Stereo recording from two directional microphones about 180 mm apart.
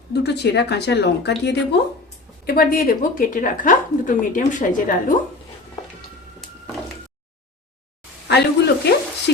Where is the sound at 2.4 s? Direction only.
50° left (ahead or behind).